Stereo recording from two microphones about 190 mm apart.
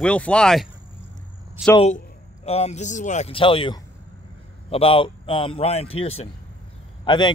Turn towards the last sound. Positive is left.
turn(degrees=25)  # may be behind; listen again after turning